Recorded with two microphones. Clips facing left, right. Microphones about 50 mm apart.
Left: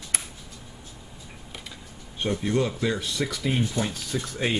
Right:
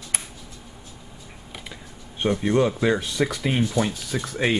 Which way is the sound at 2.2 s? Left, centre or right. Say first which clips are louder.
Right 5 dB; right.